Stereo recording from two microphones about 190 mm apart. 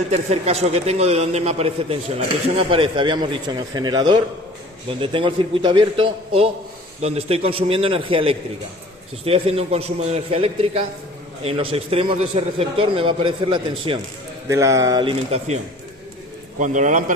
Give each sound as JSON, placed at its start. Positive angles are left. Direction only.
{"t": 0.1, "sound": "a man's voice", "side_deg": -35}
{"t": 14.4, "sound": "speech", "side_deg": -15}
{"t": 16.6, "sound": "a man's voice", "side_deg": -40}